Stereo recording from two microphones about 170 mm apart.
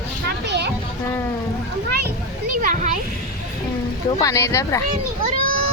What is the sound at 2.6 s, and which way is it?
Speech, 50° right (ahead or behind).